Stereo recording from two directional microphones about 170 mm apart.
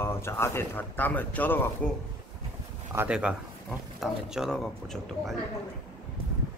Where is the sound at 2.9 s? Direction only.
10° right (ahead or behind).